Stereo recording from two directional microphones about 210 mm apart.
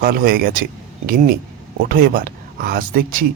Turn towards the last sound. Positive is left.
turn(degrees=-40)  # may be behind; listen again after turning